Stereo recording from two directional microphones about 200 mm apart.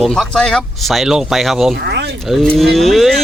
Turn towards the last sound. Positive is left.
turn(degrees=0)  # may be behind; listen again after turning